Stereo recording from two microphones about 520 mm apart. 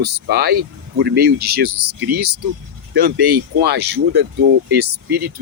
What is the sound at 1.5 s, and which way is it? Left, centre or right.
Speech, right.